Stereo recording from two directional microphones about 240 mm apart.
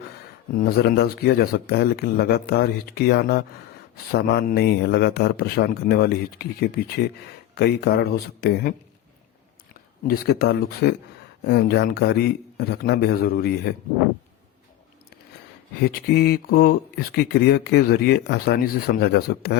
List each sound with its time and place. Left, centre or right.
0.8 s speech: left
10.1 s speech: left
15.8 s speech: left